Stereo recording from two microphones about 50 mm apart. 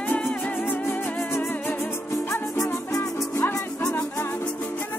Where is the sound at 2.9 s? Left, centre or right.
Left.